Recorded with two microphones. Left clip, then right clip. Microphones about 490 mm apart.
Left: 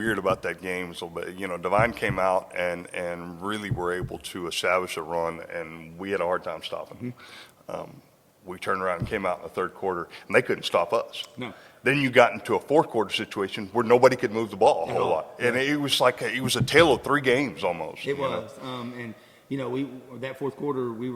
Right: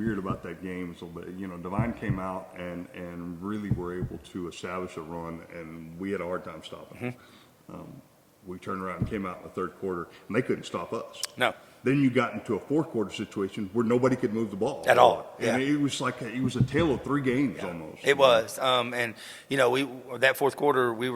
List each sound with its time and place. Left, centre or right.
0.0 s speech: left
8.4 s speech: left
18.0 s a man's voice: right